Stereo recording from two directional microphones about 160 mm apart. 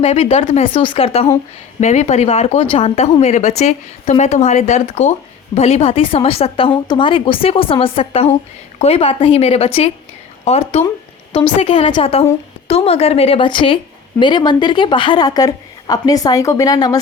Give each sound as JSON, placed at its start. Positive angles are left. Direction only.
{"t": 0.0, "sound": "a woman's voice", "side_deg": 45}
{"t": 10.8, "sound": "a sound", "side_deg": 30}
{"t": 11.6, "sound": "a woman's voice", "side_deg": 35}